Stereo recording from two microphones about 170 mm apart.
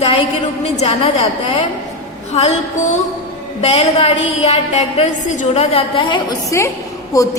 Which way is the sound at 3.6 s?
40° left (ahead or behind).